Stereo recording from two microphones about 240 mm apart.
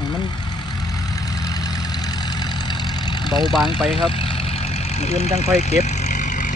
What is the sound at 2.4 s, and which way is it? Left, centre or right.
Vehicle, centre.